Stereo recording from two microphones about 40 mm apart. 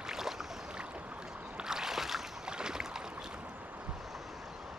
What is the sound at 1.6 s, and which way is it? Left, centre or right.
Boat, centre.